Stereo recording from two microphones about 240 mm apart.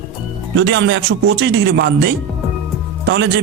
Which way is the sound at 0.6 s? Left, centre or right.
Right.